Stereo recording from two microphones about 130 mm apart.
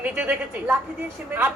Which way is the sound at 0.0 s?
10° right (ahead or behind).